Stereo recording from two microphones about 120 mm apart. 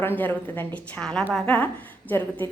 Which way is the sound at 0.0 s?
15° left (ahead or behind).